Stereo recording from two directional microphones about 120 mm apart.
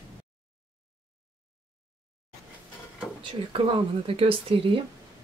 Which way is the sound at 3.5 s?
45° right (ahead or behind).